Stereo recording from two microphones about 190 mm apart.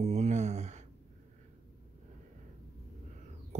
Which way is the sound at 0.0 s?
40° right (ahead or behind).